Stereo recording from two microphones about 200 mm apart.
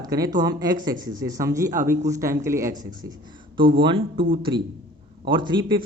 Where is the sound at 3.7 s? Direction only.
25° right (ahead or behind).